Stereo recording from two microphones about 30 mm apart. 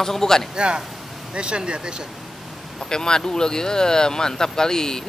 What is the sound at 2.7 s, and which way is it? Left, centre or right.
Speech, left.